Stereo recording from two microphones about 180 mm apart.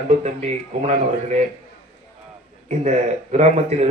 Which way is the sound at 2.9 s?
40° right (ahead or behind).